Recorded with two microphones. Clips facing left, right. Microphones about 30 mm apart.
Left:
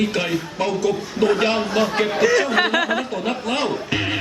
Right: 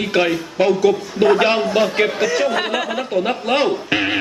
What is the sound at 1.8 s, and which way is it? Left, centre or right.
Speech, centre.